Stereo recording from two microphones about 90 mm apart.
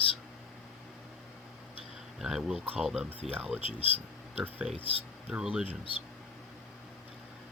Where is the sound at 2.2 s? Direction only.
5° right (ahead or behind).